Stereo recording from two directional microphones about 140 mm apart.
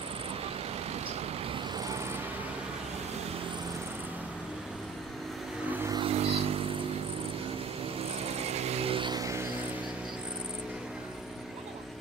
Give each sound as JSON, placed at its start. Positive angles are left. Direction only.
{"t": 5.9, "sound": "vehicle", "side_deg": -45}
{"t": 8.2, "sound": "vehicle", "side_deg": -50}